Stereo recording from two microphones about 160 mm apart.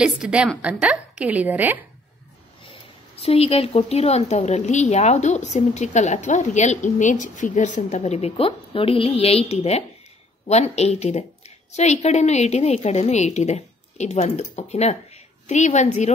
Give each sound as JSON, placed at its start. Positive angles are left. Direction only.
{"t": 0.0, "sound": "a woman's voice", "side_deg": -5}
{"t": 3.2, "sound": "a woman's voice", "side_deg": 40}